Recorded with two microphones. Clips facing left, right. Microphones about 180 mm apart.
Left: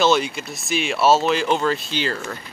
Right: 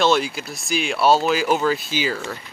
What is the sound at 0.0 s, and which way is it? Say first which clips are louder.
Speech: even; centre (ahead or behind).